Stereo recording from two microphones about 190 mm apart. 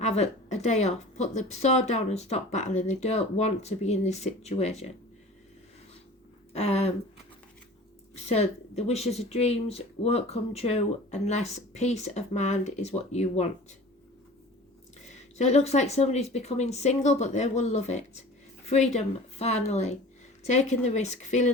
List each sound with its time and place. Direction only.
0.0 s speech: 35° left (ahead or behind)
6.5 s speech: 35° left (ahead or behind)
8.1 s speech: 35° left (ahead or behind)
15.1 s speech: 35° left (ahead or behind)